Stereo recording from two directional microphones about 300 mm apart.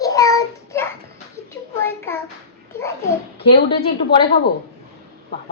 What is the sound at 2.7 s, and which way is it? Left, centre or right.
Child singing, centre.